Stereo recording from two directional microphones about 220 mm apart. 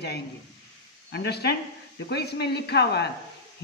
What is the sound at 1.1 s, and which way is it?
Speech, 50° left (ahead or behind).